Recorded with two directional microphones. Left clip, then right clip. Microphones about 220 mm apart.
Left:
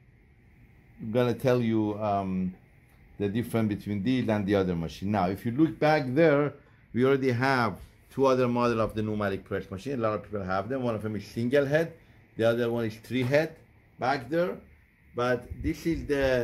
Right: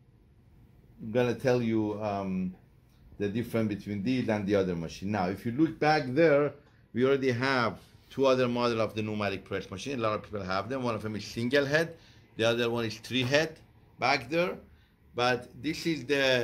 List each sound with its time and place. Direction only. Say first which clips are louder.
1.1 s speech: left 2 dB; 40° left (ahead or behind); by 14.5 s 25° left (ahead or behind)
15.6 s speech: left 1 dB; 30° left (ahead or behind)